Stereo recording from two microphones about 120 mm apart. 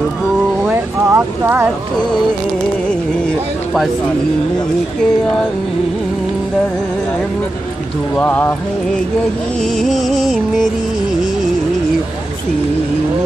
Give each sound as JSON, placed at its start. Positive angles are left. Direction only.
{"t": 0.7, "sound": "a sound", "side_deg": -20}
{"t": 8.2, "sound": "speech", "side_deg": 15}
{"t": 9.6, "sound": "music", "side_deg": 0}